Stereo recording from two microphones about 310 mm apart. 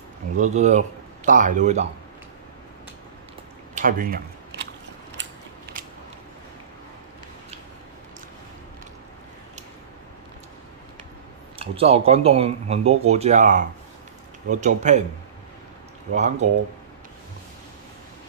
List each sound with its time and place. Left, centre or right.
0.4 s speech: right
3.7 s camera: right
11.5 s speech: centre
16.1 s speech: right